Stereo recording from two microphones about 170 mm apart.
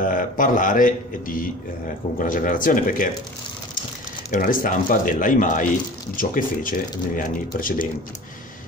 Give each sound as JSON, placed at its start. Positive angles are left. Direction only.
{"t": 0.0, "sound": "speech", "side_deg": 50}
{"t": 4.3, "sound": "speech", "side_deg": 50}